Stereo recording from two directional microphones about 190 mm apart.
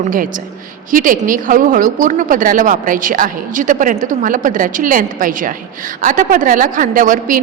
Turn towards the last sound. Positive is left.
turn(degrees=-45)  # may be behind; listen again after turning